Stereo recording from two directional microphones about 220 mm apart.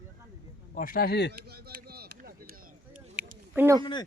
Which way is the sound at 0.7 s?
40° left (ahead or behind).